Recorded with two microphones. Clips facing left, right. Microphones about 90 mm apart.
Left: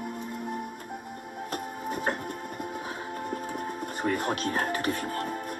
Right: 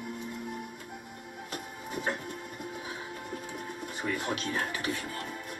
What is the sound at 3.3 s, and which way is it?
Music, 45° left (ahead or behind).